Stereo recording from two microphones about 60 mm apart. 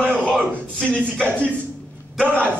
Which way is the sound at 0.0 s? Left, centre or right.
Centre.